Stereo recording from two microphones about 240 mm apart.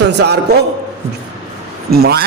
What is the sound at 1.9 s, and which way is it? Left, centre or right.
Speech, right.